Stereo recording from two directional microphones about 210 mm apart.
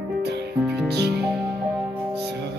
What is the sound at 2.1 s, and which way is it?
Music, 55° right (ahead or behind).